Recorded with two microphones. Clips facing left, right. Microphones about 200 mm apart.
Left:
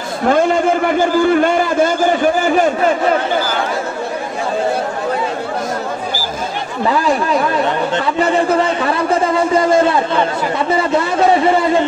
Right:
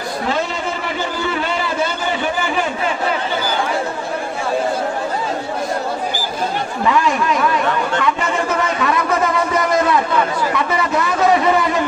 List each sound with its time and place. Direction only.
0.3 s a man's voice: 50° left (ahead or behind)
6.9 s a man's voice: 35° left (ahead or behind)
8.0 s a sound: 35° left (ahead or behind)